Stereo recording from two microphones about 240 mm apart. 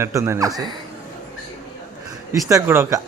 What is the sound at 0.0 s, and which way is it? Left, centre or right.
Speech, centre.